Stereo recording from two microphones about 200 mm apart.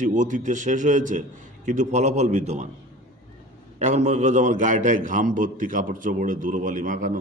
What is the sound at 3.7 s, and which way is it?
A man's voice, 35° right (ahead or behind).